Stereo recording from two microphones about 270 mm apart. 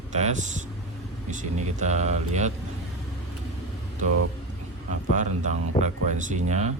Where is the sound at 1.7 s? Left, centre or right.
Right.